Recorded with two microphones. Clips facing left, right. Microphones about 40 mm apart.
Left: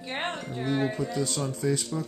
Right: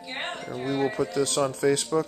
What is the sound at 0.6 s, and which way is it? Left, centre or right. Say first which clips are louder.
Speech: right 1 dB; centre.